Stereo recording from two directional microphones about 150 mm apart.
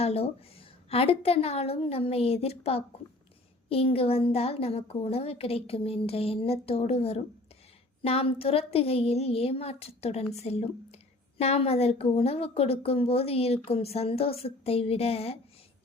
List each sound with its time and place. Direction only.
0.0 s a woman's voice: 40° left (ahead or behind)